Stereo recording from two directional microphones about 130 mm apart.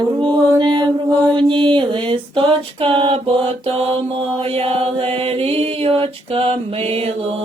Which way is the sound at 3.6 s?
45° right (ahead or behind).